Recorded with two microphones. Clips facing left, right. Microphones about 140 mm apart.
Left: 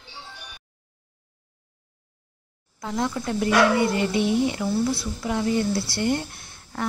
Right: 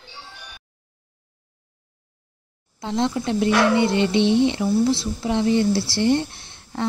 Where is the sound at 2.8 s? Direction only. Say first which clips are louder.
Right 4 dB; 25° right (ahead or behind).